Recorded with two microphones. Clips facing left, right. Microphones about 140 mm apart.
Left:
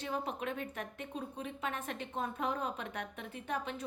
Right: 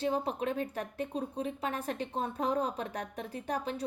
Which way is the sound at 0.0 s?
35° right (ahead or behind).